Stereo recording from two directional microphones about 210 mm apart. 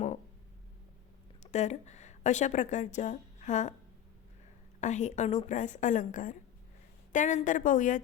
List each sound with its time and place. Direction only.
1.5 s speech: 35° left (ahead or behind)
4.8 s a woman's voice: 35° left (ahead or behind)